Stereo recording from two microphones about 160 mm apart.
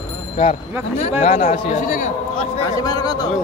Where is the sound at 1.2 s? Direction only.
45° left (ahead or behind).